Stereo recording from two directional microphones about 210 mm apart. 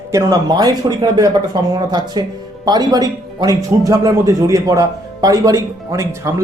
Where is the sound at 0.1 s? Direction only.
15° right (ahead or behind).